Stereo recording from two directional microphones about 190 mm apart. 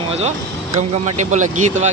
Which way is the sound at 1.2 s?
40° right (ahead or behind).